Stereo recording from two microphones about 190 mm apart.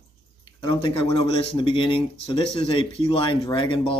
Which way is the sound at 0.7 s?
25° left (ahead or behind).